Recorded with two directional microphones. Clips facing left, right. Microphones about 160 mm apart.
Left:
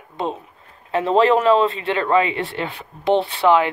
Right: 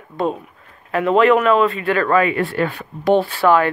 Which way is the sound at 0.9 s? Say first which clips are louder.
Right 2 dB; 30° left (ahead or behind).